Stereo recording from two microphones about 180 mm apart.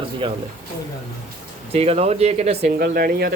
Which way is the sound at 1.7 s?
35° right (ahead or behind).